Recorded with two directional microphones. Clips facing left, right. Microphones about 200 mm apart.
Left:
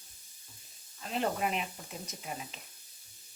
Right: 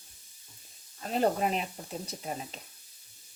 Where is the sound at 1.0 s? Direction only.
40° right (ahead or behind).